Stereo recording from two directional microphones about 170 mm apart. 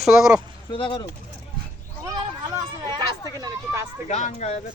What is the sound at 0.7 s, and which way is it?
Speech, 30° left (ahead or behind).